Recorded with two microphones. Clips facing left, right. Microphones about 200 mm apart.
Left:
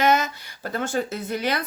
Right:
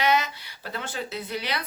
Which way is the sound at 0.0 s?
45° left (ahead or behind).